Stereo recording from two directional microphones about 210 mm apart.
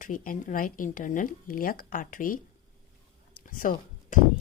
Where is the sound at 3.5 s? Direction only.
40° left (ahead or behind).